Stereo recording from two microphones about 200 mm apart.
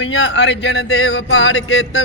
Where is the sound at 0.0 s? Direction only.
70° left (ahead or behind).